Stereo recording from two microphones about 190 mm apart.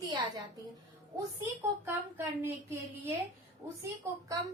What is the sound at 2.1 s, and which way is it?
Speech, 10° right (ahead or behind).